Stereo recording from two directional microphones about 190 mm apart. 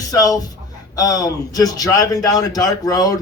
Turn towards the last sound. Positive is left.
turn(degrees=20)  # may be behind; listen again after turning